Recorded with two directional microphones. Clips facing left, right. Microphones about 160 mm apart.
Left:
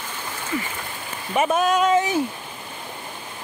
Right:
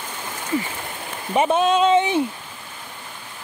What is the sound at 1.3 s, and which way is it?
Speech, 30° right (ahead or behind).